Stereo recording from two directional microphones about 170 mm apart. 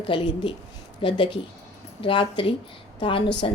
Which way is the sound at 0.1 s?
30° left (ahead or behind).